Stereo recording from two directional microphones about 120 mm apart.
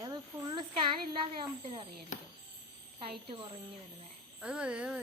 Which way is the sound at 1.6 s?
50° right (ahead or behind).